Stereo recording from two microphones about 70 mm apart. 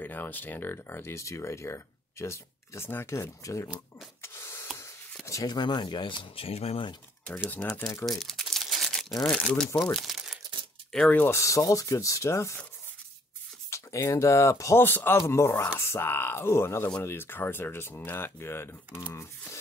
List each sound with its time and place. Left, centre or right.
0.0 s speech: left
3.1 s speech: left
4.2 s printer: left
5.2 s a sound: left
5.5 s speech: left
7.2 s speech: left
8.0 s crumpling: centre
9.3 s speech: centre
9.9 s crumpling: centre
11.2 s speech: left
13.7 s speech: left
14.8 s speech: left
15.1 s speech: left